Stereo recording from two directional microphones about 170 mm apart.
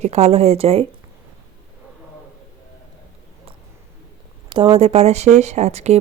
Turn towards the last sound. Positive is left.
turn(degrees=-40)  # may be behind; listen again after turning